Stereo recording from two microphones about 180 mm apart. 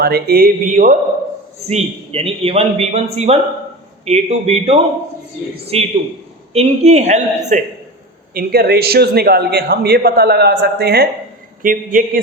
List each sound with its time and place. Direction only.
0.0 s a man's voice: 60° right (ahead or behind)
1.7 s a man's voice: 35° right (ahead or behind)
8.3 s a man's voice: 60° right (ahead or behind)
11.6 s a man's voice: 50° right (ahead or behind)